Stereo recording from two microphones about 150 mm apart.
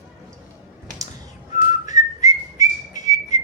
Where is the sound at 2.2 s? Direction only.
25° right (ahead or behind).